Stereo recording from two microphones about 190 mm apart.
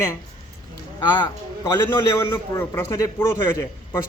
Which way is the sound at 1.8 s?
15° left (ahead or behind).